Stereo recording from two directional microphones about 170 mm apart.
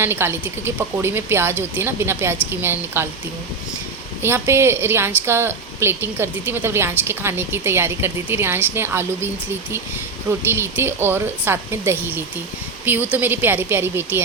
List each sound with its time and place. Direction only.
0.0 s a woman's voice: 15° right (ahead or behind)
4.2 s a woman's voice: 15° right (ahead or behind)
10.4 s a woman's voice: 15° right (ahead or behind)